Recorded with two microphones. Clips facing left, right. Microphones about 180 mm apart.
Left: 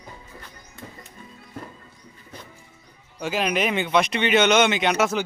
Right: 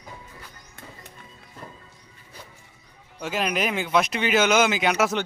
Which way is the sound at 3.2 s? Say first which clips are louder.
Left 2 dB; centre (ahead or behind).